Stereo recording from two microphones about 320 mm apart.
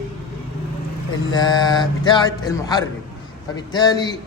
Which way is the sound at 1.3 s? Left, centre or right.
Centre.